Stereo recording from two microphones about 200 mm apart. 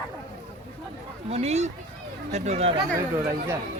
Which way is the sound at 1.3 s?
30° right (ahead or behind).